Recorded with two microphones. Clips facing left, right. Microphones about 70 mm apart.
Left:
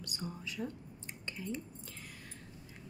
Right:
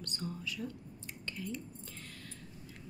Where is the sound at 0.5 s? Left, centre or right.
Left.